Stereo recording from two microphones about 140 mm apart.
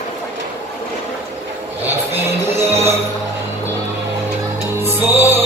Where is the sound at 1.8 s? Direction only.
15° right (ahead or behind).